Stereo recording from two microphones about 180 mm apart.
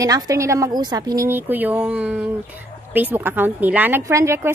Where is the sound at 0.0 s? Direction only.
20° right (ahead or behind).